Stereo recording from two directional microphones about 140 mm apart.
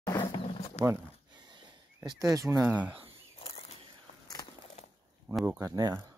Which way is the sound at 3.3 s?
45° left (ahead or behind).